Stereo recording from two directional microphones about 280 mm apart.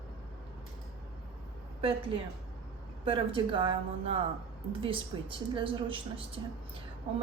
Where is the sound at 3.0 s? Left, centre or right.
Centre.